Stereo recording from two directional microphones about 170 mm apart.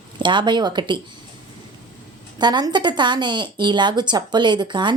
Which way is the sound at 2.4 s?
25° right (ahead or behind).